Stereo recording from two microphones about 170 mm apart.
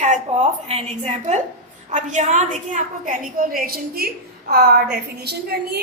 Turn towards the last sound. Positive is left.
turn(degrees=-70)  # may be behind; listen again after turning